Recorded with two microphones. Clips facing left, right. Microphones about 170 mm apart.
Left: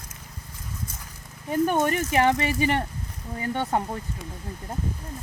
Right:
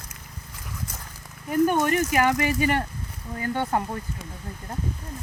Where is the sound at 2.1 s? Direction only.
25° left (ahead or behind).